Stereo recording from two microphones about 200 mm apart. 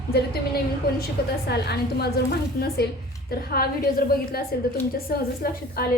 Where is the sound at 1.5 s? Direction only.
55° left (ahead or behind).